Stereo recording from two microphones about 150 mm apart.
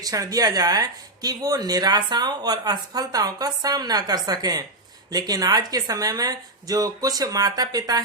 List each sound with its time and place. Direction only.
0.0 s speech: 25° right (ahead or behind)